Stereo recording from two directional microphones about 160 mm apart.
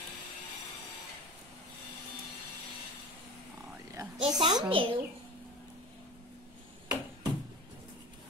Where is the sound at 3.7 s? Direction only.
15° right (ahead or behind).